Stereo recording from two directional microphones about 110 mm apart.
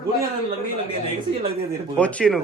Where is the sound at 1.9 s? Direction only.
10° left (ahead or behind).